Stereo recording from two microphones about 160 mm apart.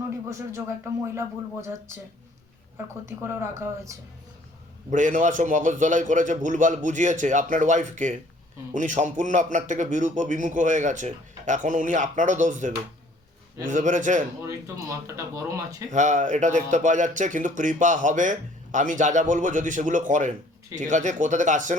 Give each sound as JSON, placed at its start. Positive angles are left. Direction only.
{"t": 0.3, "sound": "speech", "side_deg": -20}
{"t": 2.7, "sound": "speech", "side_deg": -15}
{"t": 4.9, "sound": "speech", "side_deg": -50}
{"t": 14.4, "sound": "speech", "side_deg": -20}
{"t": 15.9, "sound": "speech", "side_deg": -50}